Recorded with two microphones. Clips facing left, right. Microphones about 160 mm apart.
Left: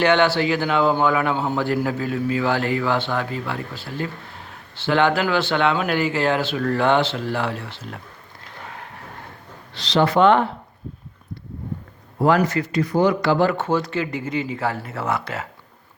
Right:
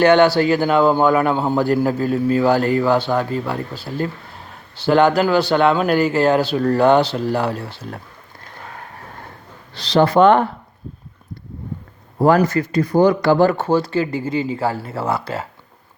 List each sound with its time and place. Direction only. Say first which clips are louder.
0.0 s a man's voice: right 5 dB; 45° right (ahead or behind)
9.7 s a man's voice: right 4 dB; 40° right (ahead or behind)
12.2 s a man's voice: right 4 dB; 40° right (ahead or behind)